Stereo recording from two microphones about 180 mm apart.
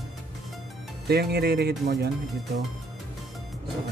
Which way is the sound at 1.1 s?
60° right (ahead or behind).